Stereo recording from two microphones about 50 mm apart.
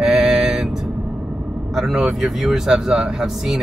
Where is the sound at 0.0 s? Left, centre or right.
Centre.